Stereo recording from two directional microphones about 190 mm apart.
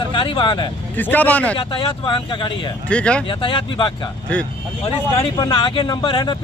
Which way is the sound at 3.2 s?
25° left (ahead or behind).